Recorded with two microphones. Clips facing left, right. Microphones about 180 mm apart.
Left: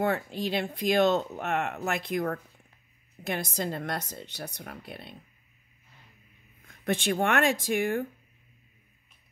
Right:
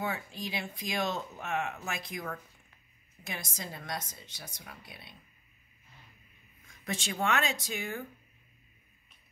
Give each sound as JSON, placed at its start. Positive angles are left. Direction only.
{"t": 0.0, "sound": "speech", "side_deg": 60}
{"t": 6.7, "sound": "speech", "side_deg": 60}